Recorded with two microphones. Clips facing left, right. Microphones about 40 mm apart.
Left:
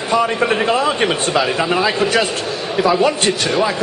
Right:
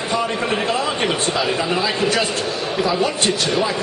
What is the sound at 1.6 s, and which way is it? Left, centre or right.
Speech, centre.